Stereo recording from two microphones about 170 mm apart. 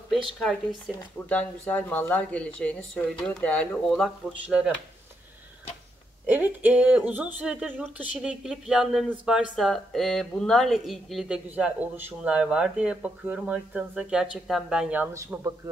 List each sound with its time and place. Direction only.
0.4 s speech: centre (ahead or behind)
6.2 s speech: 10° right (ahead or behind)